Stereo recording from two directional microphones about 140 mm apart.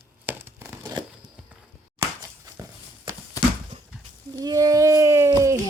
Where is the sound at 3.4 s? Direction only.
25° left (ahead or behind).